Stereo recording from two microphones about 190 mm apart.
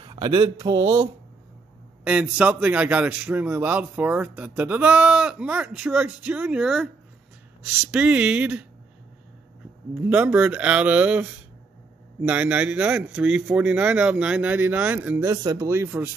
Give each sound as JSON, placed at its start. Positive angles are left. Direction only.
{"t": 0.0, "sound": "speech", "side_deg": -25}
{"t": 2.0, "sound": "a man's voice", "side_deg": -5}
{"t": 7.9, "sound": "speech", "side_deg": -5}
{"t": 9.9, "sound": "a man's voice", "side_deg": -10}